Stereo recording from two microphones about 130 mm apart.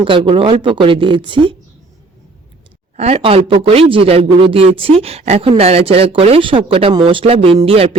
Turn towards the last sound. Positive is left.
turn(degrees=-45)  # may be behind; listen again after turning